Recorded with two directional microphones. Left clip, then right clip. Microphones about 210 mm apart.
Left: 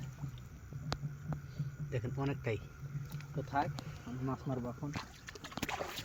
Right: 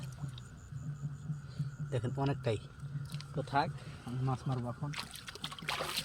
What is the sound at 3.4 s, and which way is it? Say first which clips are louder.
Speech: right 3 dB; 40° right (ahead or behind).